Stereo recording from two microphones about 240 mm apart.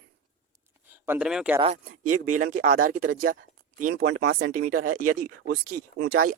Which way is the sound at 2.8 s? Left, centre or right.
Right.